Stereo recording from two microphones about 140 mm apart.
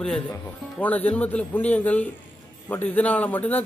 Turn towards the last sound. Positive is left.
turn(degrees=10)  # may be behind; listen again after turning